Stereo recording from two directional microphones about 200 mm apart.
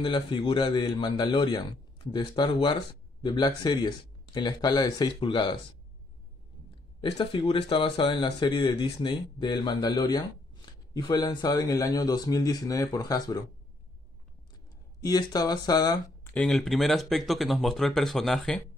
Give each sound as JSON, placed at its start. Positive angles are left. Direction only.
{"t": 0.0, "sound": "speech", "side_deg": 25}
{"t": 7.0, "sound": "speech", "side_deg": 25}
{"t": 15.0, "sound": "speech", "side_deg": 20}
{"t": 16.3, "sound": "speech", "side_deg": 0}